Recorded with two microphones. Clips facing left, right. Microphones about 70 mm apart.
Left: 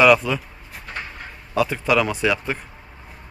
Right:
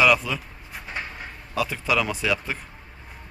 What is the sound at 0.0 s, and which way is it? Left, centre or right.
Speech, centre.